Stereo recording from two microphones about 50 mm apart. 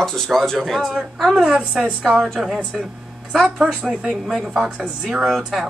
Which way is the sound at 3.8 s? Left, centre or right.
Centre.